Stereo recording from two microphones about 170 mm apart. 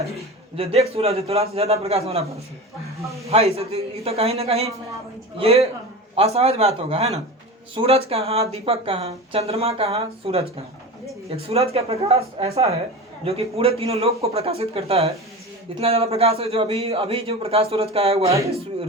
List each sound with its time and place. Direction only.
0.5 s speech: 35° right (ahead or behind)
3.2 s speech: 35° right (ahead or behind)
18.3 s speech: 20° right (ahead or behind)